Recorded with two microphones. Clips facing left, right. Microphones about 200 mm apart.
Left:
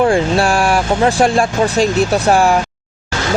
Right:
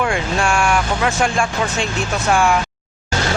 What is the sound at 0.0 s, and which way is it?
Speech, 35° left (ahead or behind).